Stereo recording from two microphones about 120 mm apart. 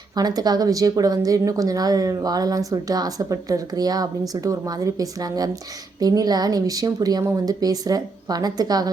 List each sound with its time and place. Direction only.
0.2 s a woman's voice: 35° right (ahead or behind)